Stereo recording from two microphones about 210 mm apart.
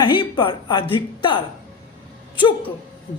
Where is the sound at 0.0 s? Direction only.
20° left (ahead or behind).